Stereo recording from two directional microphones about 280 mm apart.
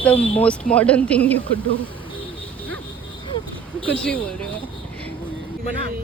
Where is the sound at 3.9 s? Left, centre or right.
Centre.